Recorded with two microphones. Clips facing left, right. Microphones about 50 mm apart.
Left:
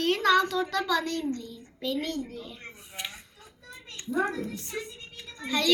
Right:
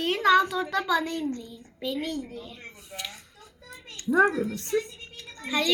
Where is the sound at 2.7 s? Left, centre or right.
Centre.